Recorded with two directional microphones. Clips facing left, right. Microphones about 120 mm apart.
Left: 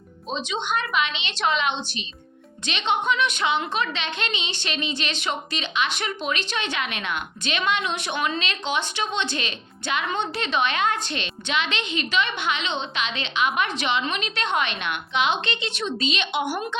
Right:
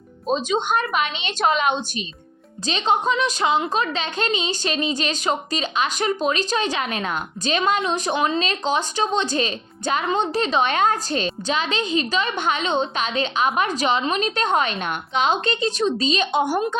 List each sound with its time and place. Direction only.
0.3 s a woman's voice: 45° right (ahead or behind)